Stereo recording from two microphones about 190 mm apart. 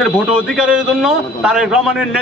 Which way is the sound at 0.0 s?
5° right (ahead or behind).